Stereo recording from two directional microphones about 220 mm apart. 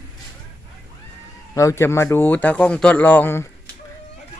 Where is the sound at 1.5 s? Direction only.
15° left (ahead or behind).